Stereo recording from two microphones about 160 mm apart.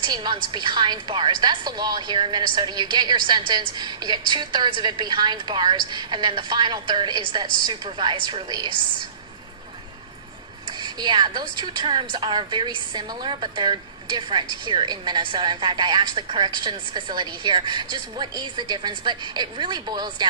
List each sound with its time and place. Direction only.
0.0 s a woman's voice: 30° right (ahead or behind)
10.8 s a woman's voice: 30° right (ahead or behind)